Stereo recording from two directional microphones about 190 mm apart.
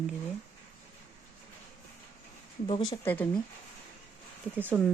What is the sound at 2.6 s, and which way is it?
Speech, 25° left (ahead or behind).